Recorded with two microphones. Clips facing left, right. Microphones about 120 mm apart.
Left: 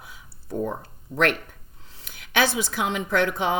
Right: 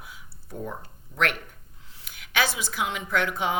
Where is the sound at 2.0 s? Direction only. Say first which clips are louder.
Left 4 dB; 30° left (ahead or behind).